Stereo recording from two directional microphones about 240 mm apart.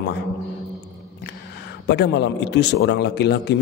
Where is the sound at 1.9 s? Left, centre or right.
Left.